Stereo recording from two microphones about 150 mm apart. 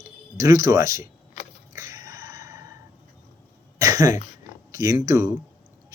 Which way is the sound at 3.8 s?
20° right (ahead or behind).